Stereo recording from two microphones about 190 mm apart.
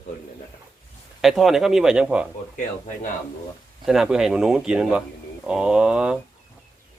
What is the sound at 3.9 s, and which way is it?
A man's voice, 5° right (ahead or behind).